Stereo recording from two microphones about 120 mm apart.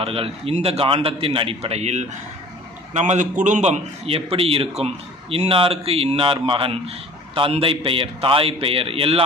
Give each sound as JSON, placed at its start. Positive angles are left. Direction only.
{"t": 0.0, "sound": "a man's voice", "side_deg": -55}
{"t": 2.9, "sound": "a man's voice", "side_deg": -80}